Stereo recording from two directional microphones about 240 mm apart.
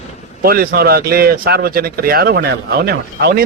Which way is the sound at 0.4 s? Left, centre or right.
Right.